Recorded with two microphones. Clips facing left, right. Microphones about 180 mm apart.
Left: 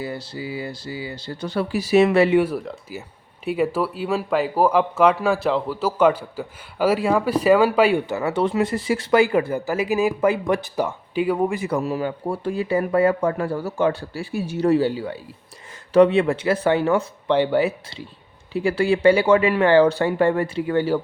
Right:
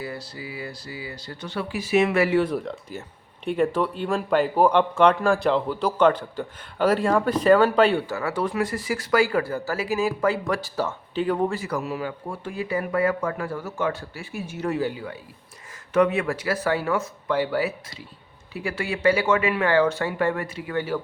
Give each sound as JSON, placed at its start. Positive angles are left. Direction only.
{"t": 0.0, "sound": "speech", "side_deg": 25}
{"t": 2.3, "sound": "speech", "side_deg": 10}
{"t": 8.0, "sound": "speech", "side_deg": 20}
{"t": 11.8, "sound": "speech", "side_deg": 35}